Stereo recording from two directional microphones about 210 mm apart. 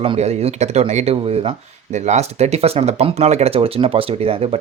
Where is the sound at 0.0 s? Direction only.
30° right (ahead or behind).